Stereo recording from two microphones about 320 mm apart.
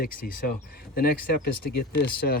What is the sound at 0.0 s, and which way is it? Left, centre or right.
Speech, left.